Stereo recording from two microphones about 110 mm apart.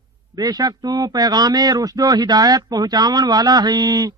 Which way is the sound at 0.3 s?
35° right (ahead or behind).